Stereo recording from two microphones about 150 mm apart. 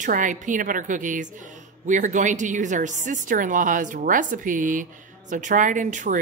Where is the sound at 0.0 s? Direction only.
60° right (ahead or behind).